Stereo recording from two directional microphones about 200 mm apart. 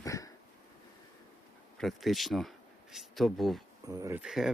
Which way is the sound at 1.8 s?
Centre (ahead or behind).